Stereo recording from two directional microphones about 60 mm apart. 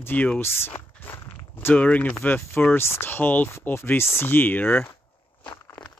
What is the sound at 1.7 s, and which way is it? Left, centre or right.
Speech, left.